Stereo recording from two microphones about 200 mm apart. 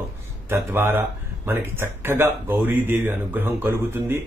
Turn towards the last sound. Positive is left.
turn(degrees=-10)  # may be behind; listen again after turning